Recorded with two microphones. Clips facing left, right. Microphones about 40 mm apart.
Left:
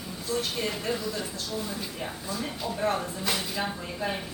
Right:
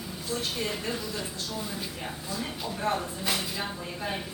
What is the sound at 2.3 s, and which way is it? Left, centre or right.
A woman's voice, centre.